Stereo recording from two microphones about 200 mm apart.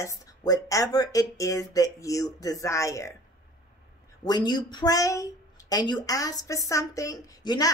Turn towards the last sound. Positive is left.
turn(degrees=20)  # may be behind; listen again after turning